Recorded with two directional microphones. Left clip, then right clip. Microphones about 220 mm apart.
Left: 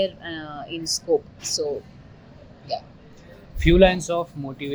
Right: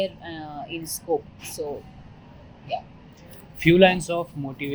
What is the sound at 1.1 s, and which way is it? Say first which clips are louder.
Speech: left 4 dB; 35° left (ahead or behind).